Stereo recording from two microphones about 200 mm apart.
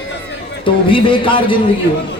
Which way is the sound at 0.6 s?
25° left (ahead or behind).